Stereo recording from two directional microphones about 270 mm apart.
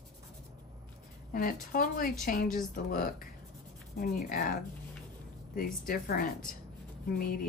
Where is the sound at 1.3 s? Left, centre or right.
Left.